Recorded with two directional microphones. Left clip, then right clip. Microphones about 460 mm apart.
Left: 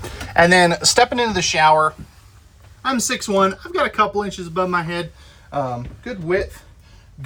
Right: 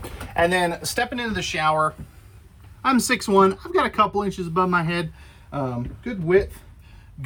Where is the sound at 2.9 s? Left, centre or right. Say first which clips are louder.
Even; right.